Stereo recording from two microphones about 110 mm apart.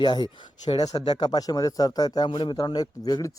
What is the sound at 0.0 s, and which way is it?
Speech, 45° left (ahead or behind).